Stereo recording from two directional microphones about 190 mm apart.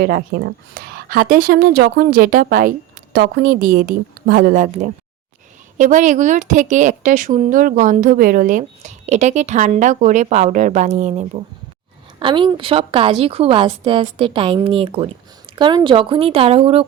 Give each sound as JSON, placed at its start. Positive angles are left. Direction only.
{"t": 0.0, "sound": "a woman's voice", "side_deg": -55}
{"t": 12.2, "sound": "a woman's voice", "side_deg": -25}